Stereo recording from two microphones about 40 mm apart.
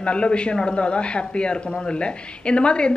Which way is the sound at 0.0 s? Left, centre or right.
Left.